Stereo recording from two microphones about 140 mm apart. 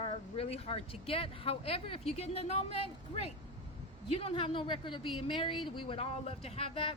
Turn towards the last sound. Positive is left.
turn(degrees=40)  # may be behind; listen again after turning